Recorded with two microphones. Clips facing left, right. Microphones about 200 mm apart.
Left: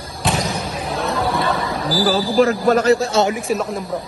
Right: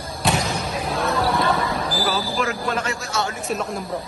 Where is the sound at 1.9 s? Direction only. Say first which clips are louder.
Left 12 dB; 30° left (ahead or behind).